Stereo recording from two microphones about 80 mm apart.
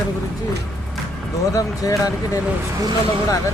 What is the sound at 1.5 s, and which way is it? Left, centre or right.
Speech, left.